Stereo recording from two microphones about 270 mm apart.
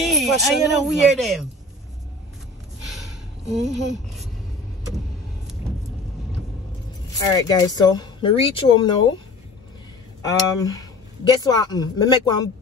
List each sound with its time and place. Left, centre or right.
0.0 s speech: centre
2.8 s snort: centre
3.4 s speech: right
3.9 s speech: centre
7.2 s speech: centre
10.2 s speech: centre